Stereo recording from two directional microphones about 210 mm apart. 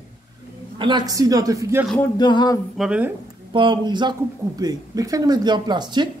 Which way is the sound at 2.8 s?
5° right (ahead or behind).